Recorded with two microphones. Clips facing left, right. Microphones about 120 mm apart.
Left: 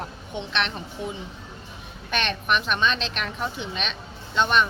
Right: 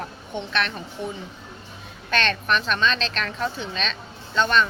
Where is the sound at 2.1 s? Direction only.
15° left (ahead or behind).